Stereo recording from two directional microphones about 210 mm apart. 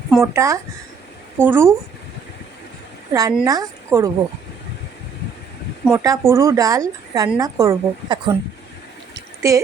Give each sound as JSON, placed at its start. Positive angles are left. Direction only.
{"t": 0.2, "sound": "speech", "side_deg": -15}
{"t": 3.1, "sound": "speech", "side_deg": -15}
{"t": 5.8, "sound": "speech", "side_deg": -15}
{"t": 9.1, "sound": "a sound", "side_deg": -15}